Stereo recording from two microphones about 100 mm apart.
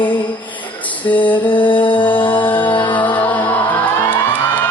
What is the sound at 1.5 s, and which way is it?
Music, 55° left (ahead or behind).